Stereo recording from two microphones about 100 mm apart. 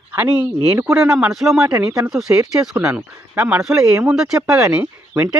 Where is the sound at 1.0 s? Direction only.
5° right (ahead or behind).